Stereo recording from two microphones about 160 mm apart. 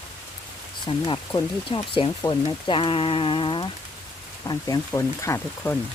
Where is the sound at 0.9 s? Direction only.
25° left (ahead or behind).